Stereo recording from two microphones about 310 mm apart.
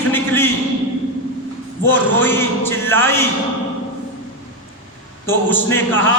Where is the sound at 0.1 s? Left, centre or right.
Centre.